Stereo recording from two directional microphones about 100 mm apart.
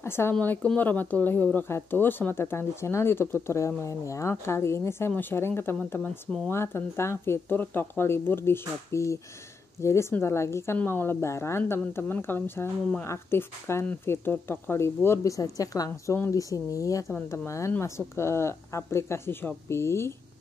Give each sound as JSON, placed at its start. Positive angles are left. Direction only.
{"t": 0.0, "sound": "speech", "side_deg": 25}